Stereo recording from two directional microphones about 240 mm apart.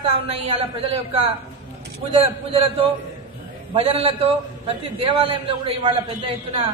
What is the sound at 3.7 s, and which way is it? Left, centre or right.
A man's voice, right.